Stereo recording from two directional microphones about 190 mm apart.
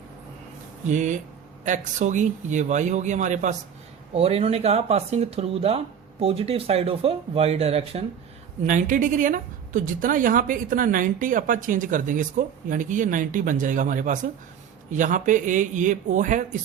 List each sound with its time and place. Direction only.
0.9 s a woman's voice: 40° right (ahead or behind)